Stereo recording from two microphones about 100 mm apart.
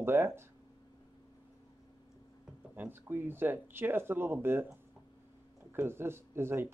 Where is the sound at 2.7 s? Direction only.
20° right (ahead or behind).